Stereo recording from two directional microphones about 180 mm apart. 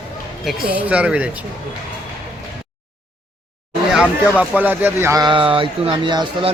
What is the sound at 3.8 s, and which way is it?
Speech, 5° right (ahead or behind).